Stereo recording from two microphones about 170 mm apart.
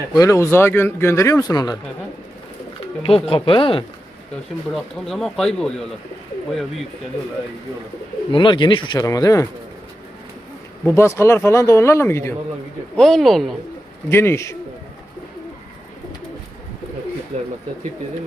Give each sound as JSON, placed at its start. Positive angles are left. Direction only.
{"t": 0.1, "sound": "speech", "side_deg": 20}
{"t": 3.0, "sound": "speech", "side_deg": 35}
{"t": 4.7, "sound": "speech", "side_deg": 0}
{"t": 8.3, "sound": "speech", "side_deg": 30}
{"t": 10.8, "sound": "speech", "side_deg": 15}
{"t": 13.0, "sound": "speech", "side_deg": 0}
{"t": 14.1, "sound": "speech", "side_deg": 15}
{"t": 17.3, "sound": "speech", "side_deg": -40}